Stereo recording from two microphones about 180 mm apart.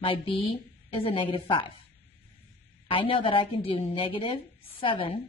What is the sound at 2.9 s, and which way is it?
A woman's voice, 30° left (ahead or behind).